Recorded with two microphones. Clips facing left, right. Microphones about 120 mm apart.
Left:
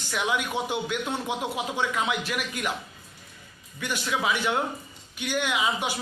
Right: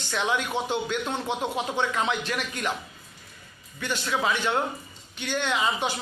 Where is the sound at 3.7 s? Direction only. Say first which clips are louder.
Right 1 dB; 10° left (ahead or behind).